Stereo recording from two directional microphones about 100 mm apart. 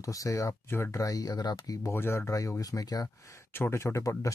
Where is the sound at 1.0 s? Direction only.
35° left (ahead or behind).